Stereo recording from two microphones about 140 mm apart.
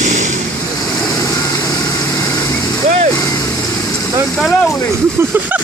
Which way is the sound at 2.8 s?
50° right (ahead or behind).